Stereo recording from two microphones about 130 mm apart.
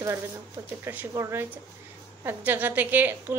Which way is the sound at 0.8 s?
20° right (ahead or behind).